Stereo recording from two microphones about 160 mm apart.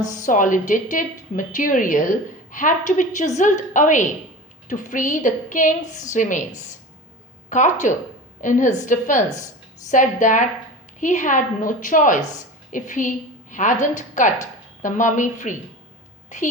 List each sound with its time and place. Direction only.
0.0 s a woman's voice: 50° left (ahead or behind)